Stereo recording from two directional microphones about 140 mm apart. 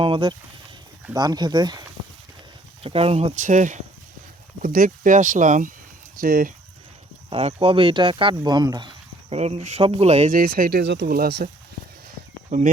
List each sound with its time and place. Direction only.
0.0 s speech: 35° right (ahead or behind)
2.8 s speech: 45° right (ahead or behind); by 3.8 s 65° right (ahead or behind)
4.6 s speech: 85° right; by 5.7 s 65° right (ahead or behind)
6.1 s speech: 90° right
7.3 s speech: 45° right (ahead or behind)
9.4 s speech: 50° right (ahead or behind)
10.3 s speech: 90° right
12.5 s speech: 65° right (ahead or behind)